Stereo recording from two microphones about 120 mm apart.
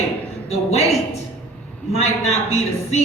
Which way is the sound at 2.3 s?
65° left (ahead or behind).